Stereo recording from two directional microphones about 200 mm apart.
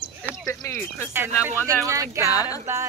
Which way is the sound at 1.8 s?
15° right (ahead or behind).